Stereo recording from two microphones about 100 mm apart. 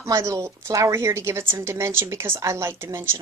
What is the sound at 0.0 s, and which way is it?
Speech, 30° right (ahead or behind).